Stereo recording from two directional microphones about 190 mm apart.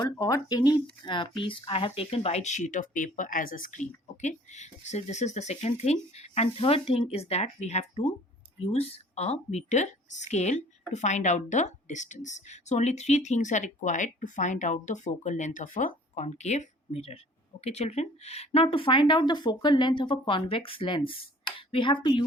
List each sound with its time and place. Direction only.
0.0 s a woman's voice: 20° left (ahead or behind)